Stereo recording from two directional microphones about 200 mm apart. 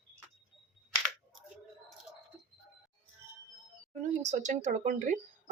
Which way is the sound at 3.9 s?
35° right (ahead or behind).